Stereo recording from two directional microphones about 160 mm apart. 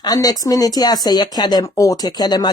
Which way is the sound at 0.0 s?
25° left (ahead or behind).